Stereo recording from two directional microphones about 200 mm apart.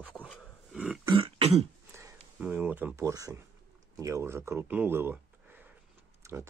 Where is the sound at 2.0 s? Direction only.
10° right (ahead or behind).